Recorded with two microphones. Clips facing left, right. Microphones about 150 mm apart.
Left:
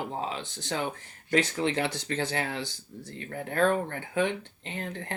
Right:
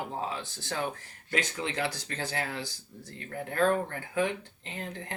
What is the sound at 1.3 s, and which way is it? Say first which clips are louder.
Speech: left 6 dB; 35° left (ahead or behind).